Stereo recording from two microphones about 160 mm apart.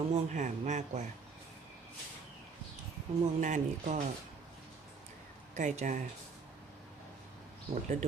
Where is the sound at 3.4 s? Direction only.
50° right (ahead or behind).